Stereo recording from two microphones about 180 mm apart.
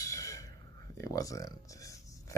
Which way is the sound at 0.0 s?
15° left (ahead or behind).